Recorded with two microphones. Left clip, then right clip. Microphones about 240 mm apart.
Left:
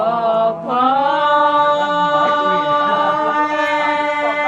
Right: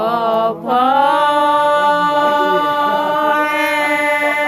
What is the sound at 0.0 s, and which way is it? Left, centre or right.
Mantra, right.